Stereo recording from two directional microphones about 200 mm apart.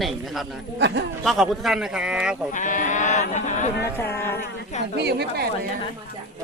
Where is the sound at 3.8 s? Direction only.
10° left (ahead or behind).